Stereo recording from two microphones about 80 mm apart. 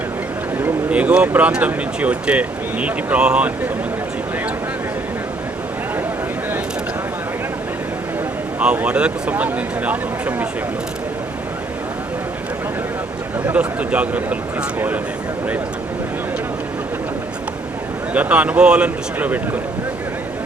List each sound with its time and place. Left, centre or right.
0.9 s speech: centre
8.6 s speech: centre
13.5 s speech: centre
18.1 s speech: centre